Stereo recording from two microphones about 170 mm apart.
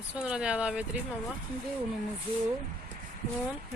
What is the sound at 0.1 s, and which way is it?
Speech, 5° right (ahead or behind).